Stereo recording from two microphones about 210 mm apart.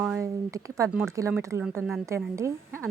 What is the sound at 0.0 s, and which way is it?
Speech, 10° right (ahead or behind).